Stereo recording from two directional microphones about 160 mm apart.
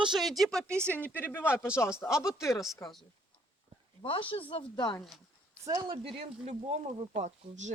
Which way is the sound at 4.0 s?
35° left (ahead or behind).